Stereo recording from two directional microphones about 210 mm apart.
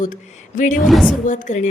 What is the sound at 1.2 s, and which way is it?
Speech, 35° left (ahead or behind).